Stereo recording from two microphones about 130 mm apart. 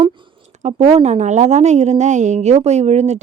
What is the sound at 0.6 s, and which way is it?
Speech, 60° right (ahead or behind).